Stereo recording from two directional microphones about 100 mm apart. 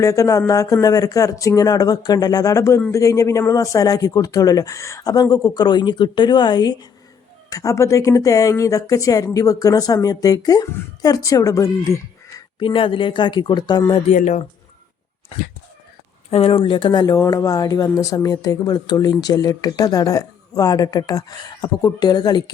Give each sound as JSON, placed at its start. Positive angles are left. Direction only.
{"t": 0.0, "sound": "speech", "side_deg": 35}
{"t": 7.5, "sound": "speech", "side_deg": 35}
{"t": 12.5, "sound": "speech", "side_deg": 55}
{"t": 16.3, "sound": "speech", "side_deg": 70}
{"t": 17.1, "sound": "speech", "side_deg": 40}